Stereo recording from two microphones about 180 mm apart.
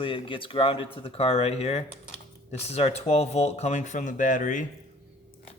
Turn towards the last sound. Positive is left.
turn(degrees=45)  # may be behind; listen again after turning